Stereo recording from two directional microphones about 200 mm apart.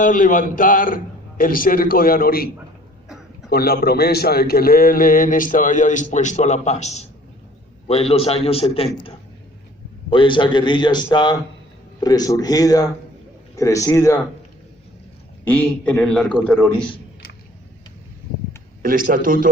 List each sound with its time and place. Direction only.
0.0 s a man's voice: 40° left (ahead or behind)
3.5 s a man's voice: 50° left (ahead or behind); by 14.2 s 15° left (ahead or behind)
15.4 s a man's voice: 5° left (ahead or behind)
18.8 s speech: 45° right (ahead or behind)